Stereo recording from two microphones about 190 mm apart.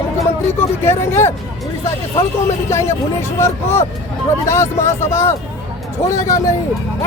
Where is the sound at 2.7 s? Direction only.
15° left (ahead or behind).